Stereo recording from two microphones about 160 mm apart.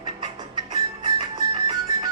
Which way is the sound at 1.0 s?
25° right (ahead or behind).